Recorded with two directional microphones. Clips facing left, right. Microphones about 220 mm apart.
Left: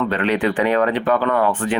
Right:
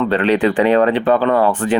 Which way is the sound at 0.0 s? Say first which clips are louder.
Right 4 dB; 30° right (ahead or behind).